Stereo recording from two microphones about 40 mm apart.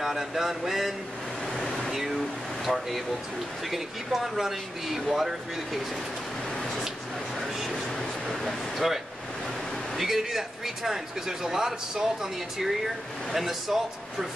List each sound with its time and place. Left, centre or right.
0.0 s a man's voice: centre
1.6 s air conditioning: centre
1.9 s a sound: centre
3.7 s a man's voice: centre
8.3 s a man's voice: centre